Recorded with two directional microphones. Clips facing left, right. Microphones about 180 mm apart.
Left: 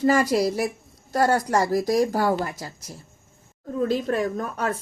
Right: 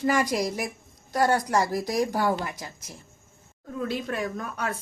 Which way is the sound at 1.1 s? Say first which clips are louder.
Left 2 dB; 45° left (ahead or behind).